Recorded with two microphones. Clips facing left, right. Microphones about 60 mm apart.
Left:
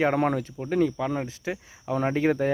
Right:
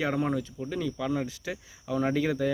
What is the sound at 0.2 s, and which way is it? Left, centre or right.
Speech, left.